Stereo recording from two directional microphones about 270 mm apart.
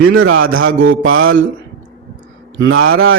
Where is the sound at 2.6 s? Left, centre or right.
Right.